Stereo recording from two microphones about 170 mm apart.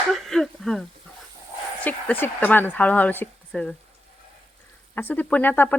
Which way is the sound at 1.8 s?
10° left (ahead or behind).